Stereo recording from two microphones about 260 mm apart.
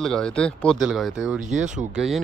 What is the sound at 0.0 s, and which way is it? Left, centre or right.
Speech, centre.